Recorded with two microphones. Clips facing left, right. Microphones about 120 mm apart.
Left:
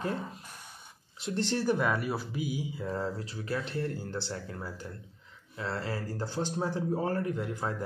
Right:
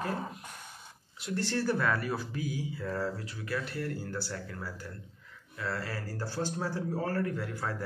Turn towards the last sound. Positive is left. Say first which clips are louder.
# left 2 dB
turn(degrees=20)  # may be behind; listen again after turning